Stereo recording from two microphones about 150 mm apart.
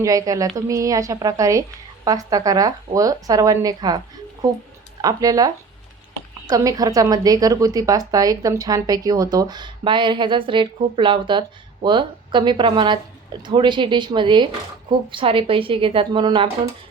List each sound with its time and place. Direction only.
0.0 s a woman's voice: 25° right (ahead or behind)
5.0 s a woman's voice: 25° right (ahead or behind)
6.5 s a woman's voice: 25° right (ahead or behind)